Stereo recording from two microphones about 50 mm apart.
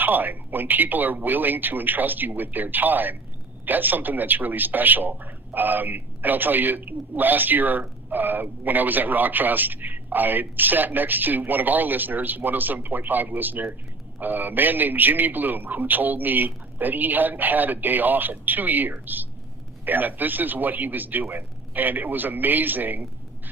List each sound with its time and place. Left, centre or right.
0.0 s a man's voice: right